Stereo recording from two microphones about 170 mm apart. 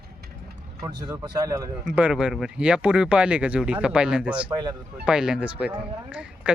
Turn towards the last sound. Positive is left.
turn(degrees=-5)  # may be behind; listen again after turning